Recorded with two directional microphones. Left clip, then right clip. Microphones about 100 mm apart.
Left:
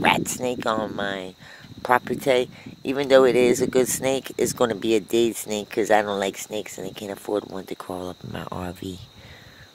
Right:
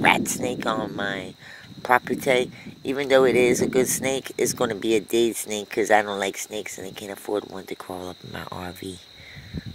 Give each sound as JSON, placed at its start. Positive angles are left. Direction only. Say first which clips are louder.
{"t": 0.0, "sound": "speech", "louder": "right 1 dB", "side_deg": 45}